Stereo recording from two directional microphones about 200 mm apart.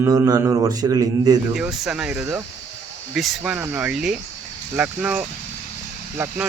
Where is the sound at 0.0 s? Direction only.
15° right (ahead or behind).